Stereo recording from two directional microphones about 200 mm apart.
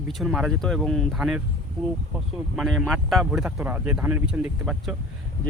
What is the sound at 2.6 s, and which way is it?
Speech, centre (ahead or behind).